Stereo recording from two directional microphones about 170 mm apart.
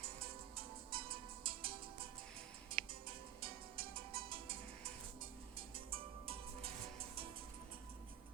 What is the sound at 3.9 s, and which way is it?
Music, 30° right (ahead or behind).